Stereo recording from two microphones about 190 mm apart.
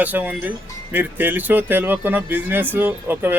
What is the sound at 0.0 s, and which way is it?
Speech, 10° right (ahead or behind).